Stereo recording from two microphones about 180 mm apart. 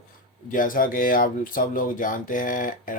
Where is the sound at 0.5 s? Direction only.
50° left (ahead or behind).